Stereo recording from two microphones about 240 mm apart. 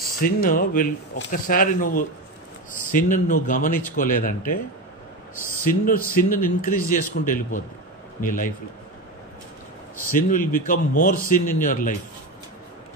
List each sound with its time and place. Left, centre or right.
0.0 s speech: left
5.7 s speech: left
10.1 s speech: left